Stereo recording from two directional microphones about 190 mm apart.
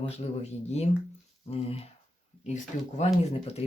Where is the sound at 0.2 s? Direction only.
35° left (ahead or behind).